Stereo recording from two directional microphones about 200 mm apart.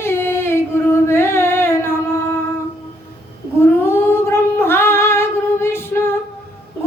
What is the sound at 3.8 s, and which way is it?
Humming, 10° left (ahead or behind).